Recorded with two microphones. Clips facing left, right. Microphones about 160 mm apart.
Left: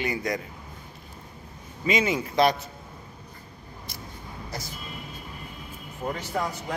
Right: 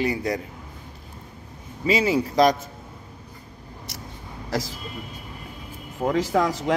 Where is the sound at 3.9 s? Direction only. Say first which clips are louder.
Right 2 dB; 75° right (ahead or behind).